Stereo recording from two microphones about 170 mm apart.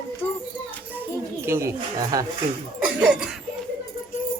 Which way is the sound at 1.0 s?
15° right (ahead or behind).